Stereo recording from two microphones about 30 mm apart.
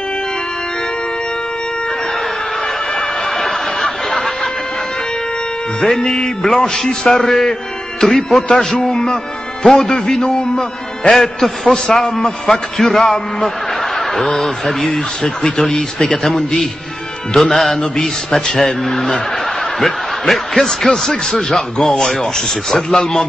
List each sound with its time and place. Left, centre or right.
3.3 s a sound: centre
5.9 s a man's voice: centre
8.4 s a man's voice: left
17.4 s mantra: centre
18.7 s a man's voice: centre
19.8 s a man's voice: centre